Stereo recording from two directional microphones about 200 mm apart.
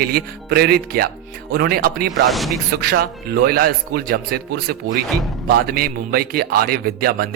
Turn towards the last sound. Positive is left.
turn(degrees=-50)  # may be behind; listen again after turning